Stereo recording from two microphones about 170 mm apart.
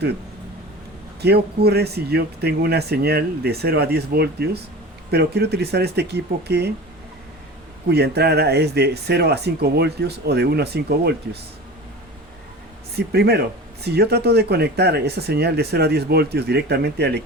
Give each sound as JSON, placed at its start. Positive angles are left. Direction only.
{"t": 1.2, "sound": "speech", "side_deg": -70}
{"t": 7.9, "sound": "speech", "side_deg": -70}
{"t": 13.0, "sound": "speech", "side_deg": -70}